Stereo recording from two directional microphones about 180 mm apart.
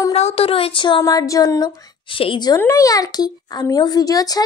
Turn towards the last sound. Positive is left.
turn(degrees=20)  # may be behind; listen again after turning